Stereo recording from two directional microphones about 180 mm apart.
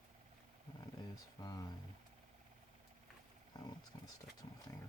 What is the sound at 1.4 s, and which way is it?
Speech, 20° left (ahead or behind).